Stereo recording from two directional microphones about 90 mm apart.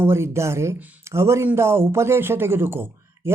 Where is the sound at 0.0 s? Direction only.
30° right (ahead or behind).